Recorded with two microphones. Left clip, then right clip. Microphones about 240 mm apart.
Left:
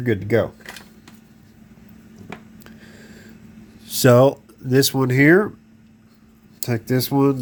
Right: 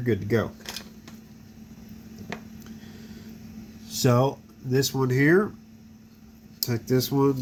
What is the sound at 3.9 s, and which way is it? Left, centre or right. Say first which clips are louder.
Speech: left 10 dB; left.